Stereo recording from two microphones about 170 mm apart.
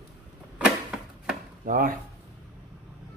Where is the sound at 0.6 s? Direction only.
5° right (ahead or behind).